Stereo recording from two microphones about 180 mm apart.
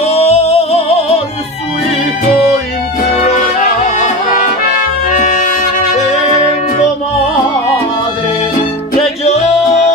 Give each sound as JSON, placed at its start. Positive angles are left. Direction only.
{"t": 0.0, "sound": "music", "side_deg": 35}
{"t": 3.2, "sound": "music", "side_deg": 40}
{"t": 9.0, "sound": "music", "side_deg": 35}